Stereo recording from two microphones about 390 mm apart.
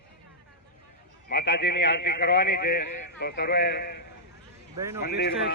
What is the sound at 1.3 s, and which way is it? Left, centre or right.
A man's voice, left.